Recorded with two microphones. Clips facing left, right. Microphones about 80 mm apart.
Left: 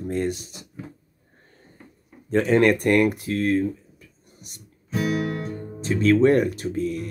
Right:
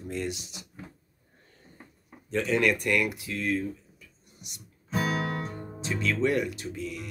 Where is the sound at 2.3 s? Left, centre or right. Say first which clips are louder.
Left 7 dB; left.